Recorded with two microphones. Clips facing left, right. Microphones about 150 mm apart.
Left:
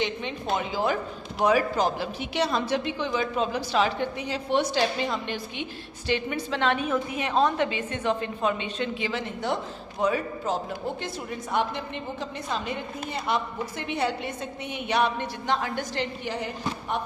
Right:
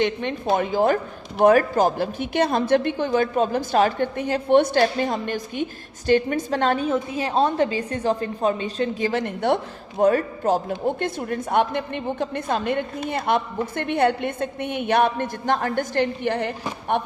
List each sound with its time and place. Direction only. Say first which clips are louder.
0.0 s a woman's voice: right 6 dB; 55° right (ahead or behind)
9.2 s a woman's voice: right 7 dB; 60° right (ahead or behind)
10.0 s a woman's voice: right 7 dB; 50° right (ahead or behind)